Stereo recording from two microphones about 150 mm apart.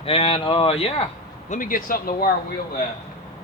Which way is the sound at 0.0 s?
40° left (ahead or behind).